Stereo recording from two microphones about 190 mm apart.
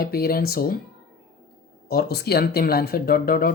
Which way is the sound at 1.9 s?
55° left (ahead or behind).